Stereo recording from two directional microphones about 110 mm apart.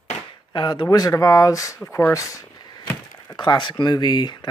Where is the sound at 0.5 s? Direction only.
40° left (ahead or behind).